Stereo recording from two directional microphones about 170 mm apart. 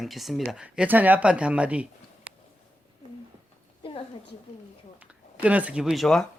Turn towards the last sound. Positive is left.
turn(degrees=0)  # may be behind; listen again after turning